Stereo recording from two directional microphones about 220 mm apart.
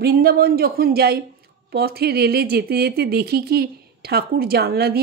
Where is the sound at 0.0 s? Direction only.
45° right (ahead or behind).